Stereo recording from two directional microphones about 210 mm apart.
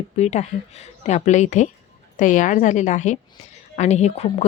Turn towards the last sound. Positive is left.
turn(degrees=30)  # may be behind; listen again after turning